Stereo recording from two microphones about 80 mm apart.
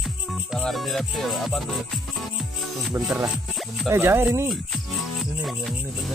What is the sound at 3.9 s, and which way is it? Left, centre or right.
Speech, right.